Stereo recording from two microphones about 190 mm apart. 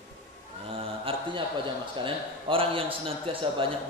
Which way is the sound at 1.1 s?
30° right (ahead or behind).